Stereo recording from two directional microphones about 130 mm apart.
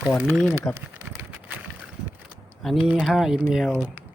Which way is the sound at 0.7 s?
15° left (ahead or behind).